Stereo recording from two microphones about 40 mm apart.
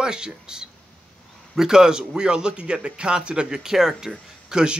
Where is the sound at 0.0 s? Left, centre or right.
Centre.